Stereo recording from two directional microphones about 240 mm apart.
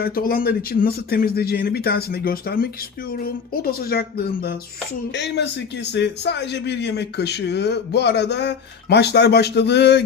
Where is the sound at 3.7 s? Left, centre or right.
Left.